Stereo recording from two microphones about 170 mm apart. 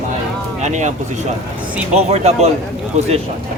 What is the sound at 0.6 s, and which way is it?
Speech, 45° right (ahead or behind).